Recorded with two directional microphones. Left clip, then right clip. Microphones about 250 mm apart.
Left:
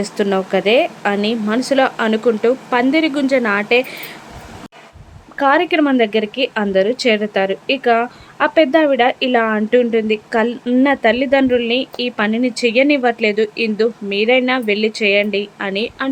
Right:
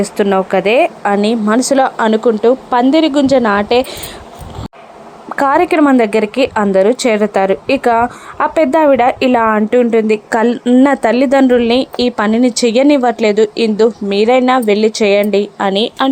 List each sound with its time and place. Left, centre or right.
0.0 s a woman's voice: centre
5.4 s a woman's voice: centre